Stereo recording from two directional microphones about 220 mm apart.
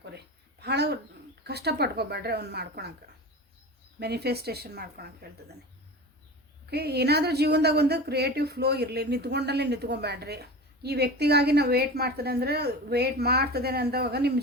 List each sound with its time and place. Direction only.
0.6 s a sound: 50° right (ahead or behind)
1.5 s a woman's voice: 45° right (ahead or behind)
4.0 s a woman's voice: 45° right (ahead or behind)
6.7 s a woman's voice: 45° right (ahead or behind)